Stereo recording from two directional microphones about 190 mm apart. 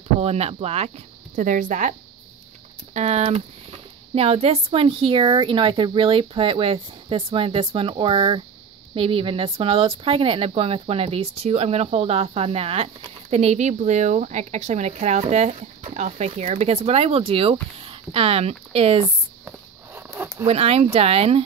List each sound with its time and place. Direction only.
0.2 s speech: 35° right (ahead or behind)
19.4 s a sound: 10° right (ahead or behind)
20.4 s speech: 30° right (ahead or behind)